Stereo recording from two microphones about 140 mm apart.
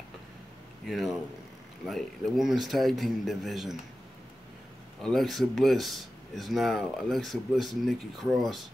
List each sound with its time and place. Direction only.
0.8 s speech: centre (ahead or behind)
5.0 s speech: centre (ahead or behind)